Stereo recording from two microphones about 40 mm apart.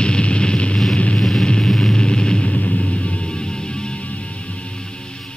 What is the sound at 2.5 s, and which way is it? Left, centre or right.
Music, left.